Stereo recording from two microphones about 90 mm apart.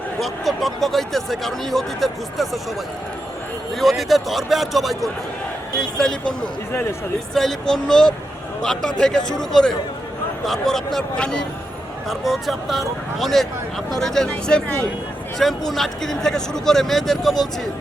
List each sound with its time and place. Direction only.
0.2 s speech: centre (ahead or behind)
3.8 s speech: centre (ahead or behind)
7.3 s speech: 5° left (ahead or behind)